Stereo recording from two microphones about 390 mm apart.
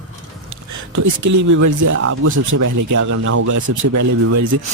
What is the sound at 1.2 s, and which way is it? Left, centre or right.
Speech, right.